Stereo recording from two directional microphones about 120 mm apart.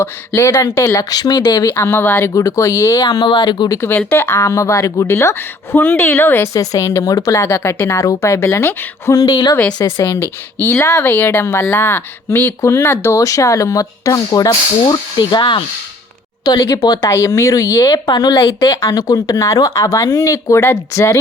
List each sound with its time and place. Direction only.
0.0 s speech: 20° left (ahead or behind)
1.7 s speech: 20° left (ahead or behind); by 3.8 s 40° left (ahead or behind)
3.8 s speech: 15° left (ahead or behind)
6.5 s speech: 30° left (ahead or behind)